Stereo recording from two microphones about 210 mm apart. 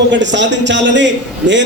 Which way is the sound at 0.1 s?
60° right (ahead or behind).